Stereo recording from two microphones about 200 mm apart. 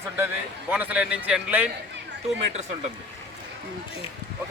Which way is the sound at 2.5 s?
35° right (ahead or behind).